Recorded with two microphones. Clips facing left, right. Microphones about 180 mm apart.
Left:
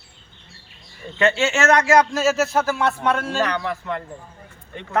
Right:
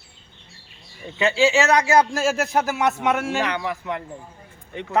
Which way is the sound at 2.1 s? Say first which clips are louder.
Left 3 dB; 10° right (ahead or behind).